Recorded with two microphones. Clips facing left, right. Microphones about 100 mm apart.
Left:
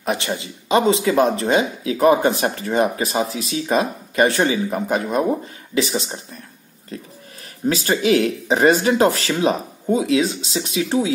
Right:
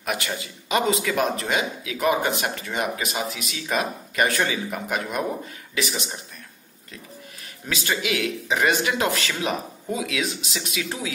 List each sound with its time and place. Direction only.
0.0 s speech: 30° left (ahead or behind)
7.6 s speech: 35° left (ahead or behind)